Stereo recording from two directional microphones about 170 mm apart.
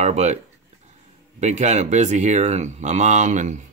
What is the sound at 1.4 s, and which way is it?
Speech, 45° right (ahead or behind).